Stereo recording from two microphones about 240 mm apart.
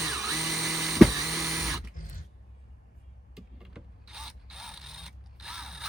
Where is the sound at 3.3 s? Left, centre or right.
Centre.